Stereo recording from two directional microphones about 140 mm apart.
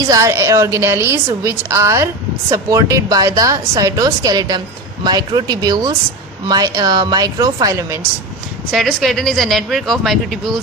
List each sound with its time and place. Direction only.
0.1 s a woman's voice: 20° right (ahead or behind)
8.7 s speech: centre (ahead or behind)